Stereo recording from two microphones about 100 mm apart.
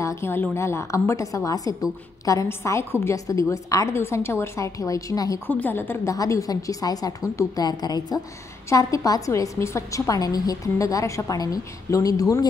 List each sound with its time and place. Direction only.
0.0 s a woman's voice: 25° left (ahead or behind)
5.5 s a woman's voice: 15° left (ahead or behind)
6.1 s a woman's voice: 35° left (ahead or behind)